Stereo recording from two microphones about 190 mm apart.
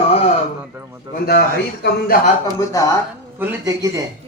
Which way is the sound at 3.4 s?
15° right (ahead or behind).